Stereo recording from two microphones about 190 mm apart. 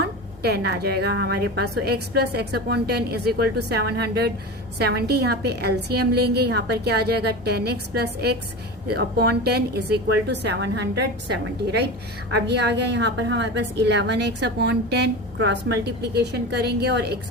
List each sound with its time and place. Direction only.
0.0 s a woman's voice: 60° right (ahead or behind)